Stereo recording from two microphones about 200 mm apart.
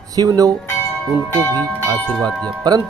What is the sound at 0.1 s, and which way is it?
Speech, 20° right (ahead or behind).